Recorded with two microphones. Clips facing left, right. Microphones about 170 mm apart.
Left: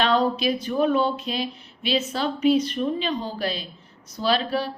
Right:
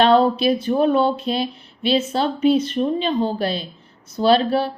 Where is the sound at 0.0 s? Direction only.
30° right (ahead or behind).